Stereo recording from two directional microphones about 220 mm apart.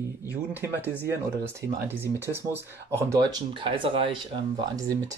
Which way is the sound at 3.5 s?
25° right (ahead or behind).